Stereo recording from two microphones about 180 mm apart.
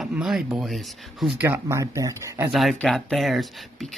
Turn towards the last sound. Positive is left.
turn(degrees=0)  # may be behind; listen again after turning